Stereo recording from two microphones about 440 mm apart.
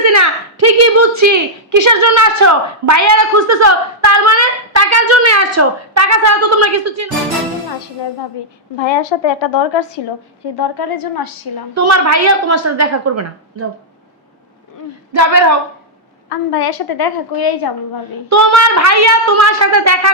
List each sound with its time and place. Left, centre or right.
0.1 s a woman's voice: right
8.8 s a woman's voice: left
10.6 s a woman's voice: left
11.7 s a woman's voice: right
15.1 s a woman's voice: right
16.3 s a woman's voice: left
18.3 s a woman's voice: right